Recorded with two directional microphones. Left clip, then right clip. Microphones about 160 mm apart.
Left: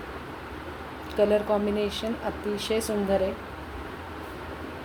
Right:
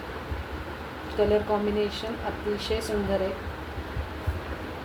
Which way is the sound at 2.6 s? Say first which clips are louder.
Left 2 dB; 60° left (ahead or behind).